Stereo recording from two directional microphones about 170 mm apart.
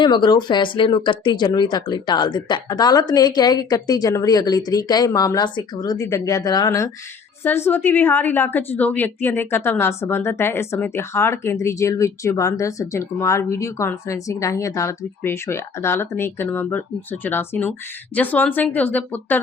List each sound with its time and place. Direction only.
0.0 s a woman's voice: 25° left (ahead or behind); by 19.4 s 10° left (ahead or behind)